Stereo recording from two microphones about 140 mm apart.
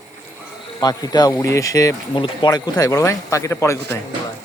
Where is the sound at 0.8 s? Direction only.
30° left (ahead or behind).